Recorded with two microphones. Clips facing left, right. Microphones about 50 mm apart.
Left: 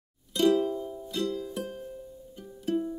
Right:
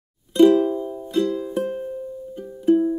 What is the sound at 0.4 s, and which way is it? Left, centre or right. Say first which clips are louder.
Music: right 9 dB; right.